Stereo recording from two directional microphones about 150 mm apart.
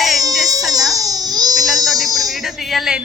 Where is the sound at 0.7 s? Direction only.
25° right (ahead or behind).